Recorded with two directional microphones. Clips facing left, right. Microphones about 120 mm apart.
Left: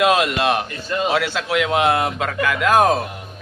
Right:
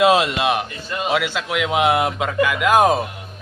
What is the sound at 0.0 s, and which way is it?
Speech, 25° right (ahead or behind).